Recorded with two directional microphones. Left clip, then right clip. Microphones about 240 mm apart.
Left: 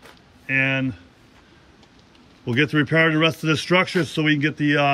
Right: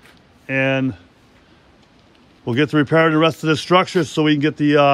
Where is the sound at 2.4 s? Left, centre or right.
Centre.